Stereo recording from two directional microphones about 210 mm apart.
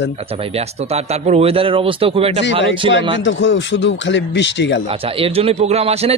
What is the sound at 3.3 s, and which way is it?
Speech, 60° left (ahead or behind).